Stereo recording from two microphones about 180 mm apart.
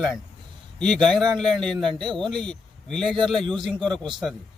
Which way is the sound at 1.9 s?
25° right (ahead or behind).